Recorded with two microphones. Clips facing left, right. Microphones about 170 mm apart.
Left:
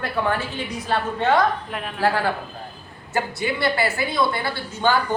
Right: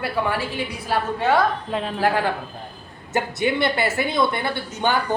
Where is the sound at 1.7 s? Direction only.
25° right (ahead or behind).